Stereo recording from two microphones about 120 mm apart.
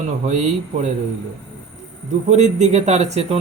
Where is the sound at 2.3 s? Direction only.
75° right (ahead or behind).